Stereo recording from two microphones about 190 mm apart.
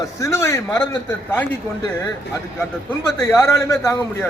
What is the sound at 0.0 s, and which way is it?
Speech, 15° left (ahead or behind).